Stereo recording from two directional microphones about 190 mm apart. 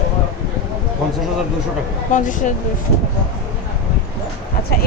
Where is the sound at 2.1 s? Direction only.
40° left (ahead or behind).